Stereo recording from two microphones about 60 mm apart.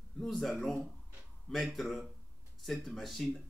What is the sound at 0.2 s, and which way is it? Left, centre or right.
A man's voice, centre.